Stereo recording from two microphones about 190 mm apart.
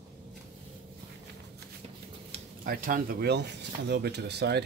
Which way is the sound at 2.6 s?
50° right (ahead or behind).